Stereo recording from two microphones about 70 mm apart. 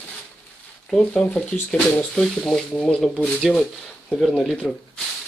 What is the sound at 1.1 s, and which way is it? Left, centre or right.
Speech, left.